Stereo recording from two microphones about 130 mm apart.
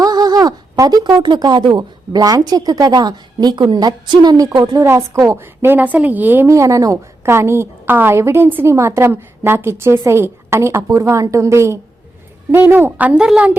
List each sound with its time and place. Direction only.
0.0 s a woman's voice: 30° right (ahead or behind)
5.7 s a woman's voice: 10° right (ahead or behind)